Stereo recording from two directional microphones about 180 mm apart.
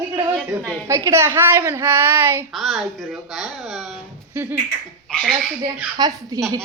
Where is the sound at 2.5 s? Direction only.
Centre (ahead or behind).